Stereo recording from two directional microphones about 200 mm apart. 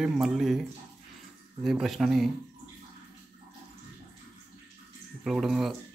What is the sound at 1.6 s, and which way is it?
Speech, centre (ahead or behind).